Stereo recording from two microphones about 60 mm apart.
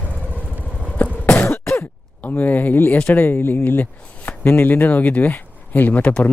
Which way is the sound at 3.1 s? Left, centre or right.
Left.